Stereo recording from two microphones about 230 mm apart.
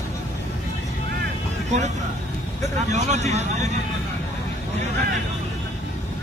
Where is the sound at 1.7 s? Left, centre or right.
Right.